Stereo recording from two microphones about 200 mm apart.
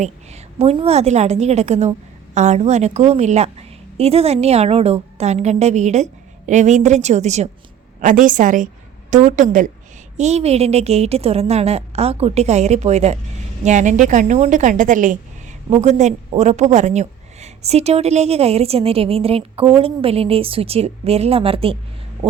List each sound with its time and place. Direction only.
0.6 s a woman's voice: 30° right (ahead or behind)